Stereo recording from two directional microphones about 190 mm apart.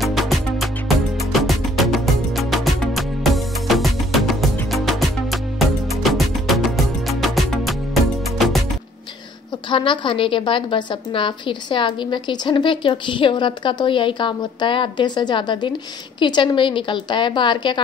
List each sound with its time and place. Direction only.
0.0 s music: centre (ahead or behind)
9.7 s a woman's voice: 25° left (ahead or behind)